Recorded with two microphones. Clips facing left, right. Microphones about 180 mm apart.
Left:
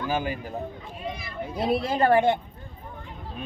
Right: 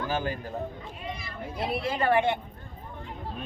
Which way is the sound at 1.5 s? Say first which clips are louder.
Left 5 dB; 40° left (ahead or behind).